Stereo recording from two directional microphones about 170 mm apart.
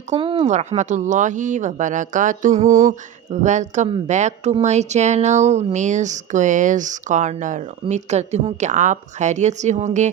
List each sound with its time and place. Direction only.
0.1 s speech: 30° right (ahead or behind)
0.5 s speech: 45° right (ahead or behind)